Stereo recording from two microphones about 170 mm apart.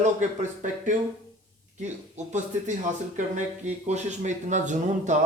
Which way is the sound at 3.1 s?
45° right (ahead or behind).